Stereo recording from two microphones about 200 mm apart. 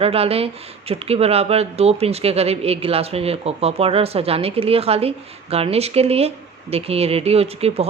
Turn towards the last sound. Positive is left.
turn(degrees=-30)  # may be behind; listen again after turning